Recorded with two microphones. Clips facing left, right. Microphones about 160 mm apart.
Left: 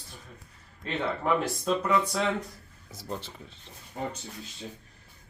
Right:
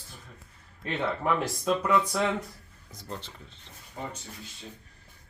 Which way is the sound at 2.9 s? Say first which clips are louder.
Left 3 dB; 10° left (ahead or behind).